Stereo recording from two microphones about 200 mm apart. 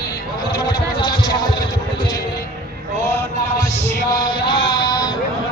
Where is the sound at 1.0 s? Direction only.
20° left (ahead or behind).